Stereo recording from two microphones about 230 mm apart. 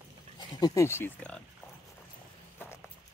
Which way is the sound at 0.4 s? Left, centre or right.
Centre.